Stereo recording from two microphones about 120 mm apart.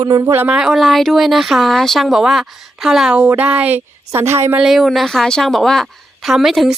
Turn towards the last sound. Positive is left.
turn(degrees=0)  # may be behind; listen again after turning